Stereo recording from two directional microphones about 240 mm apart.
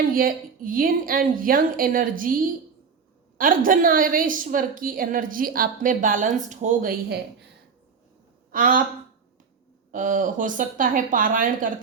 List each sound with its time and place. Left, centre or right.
0.1 s a woman's voice: right
8.5 s a woman's voice: right
9.9 s a woman's voice: right